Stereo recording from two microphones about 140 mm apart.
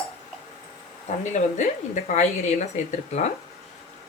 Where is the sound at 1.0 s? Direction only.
60° left (ahead or behind).